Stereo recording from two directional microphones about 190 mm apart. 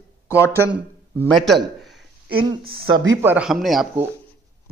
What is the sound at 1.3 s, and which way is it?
Speech, centre (ahead or behind).